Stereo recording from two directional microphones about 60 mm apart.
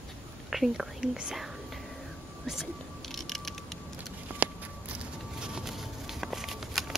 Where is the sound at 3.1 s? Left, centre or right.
Centre.